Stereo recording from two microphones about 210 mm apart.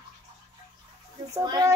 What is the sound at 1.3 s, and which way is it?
Speech, 15° right (ahead or behind).